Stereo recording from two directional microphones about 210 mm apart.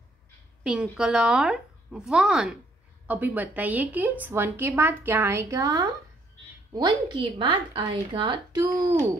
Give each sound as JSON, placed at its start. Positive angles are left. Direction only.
{"t": 0.7, "sound": "a woman's voice", "side_deg": -5}